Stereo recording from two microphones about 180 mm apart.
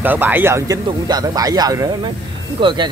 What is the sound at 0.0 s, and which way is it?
Speech, 10° right (ahead or behind).